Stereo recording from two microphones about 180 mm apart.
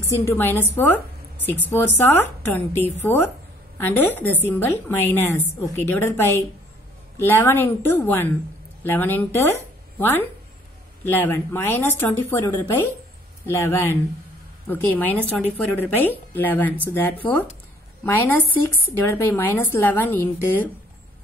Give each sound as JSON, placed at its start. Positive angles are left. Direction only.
{"t": 0.1, "sound": "a woman's voice", "side_deg": 15}
{"t": 18.0, "sound": "speech", "side_deg": 15}